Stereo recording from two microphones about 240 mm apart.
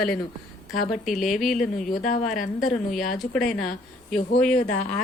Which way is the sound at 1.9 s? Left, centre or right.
Left.